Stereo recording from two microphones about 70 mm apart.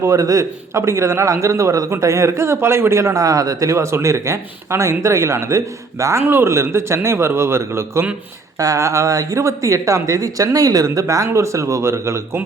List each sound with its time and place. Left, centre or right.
0.0 s a man's voice: right
6.2 s a man's voice: right
8.5 s a man's voice: right